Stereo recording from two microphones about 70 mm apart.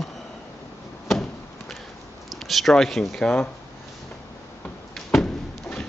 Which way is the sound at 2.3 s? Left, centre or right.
Centre.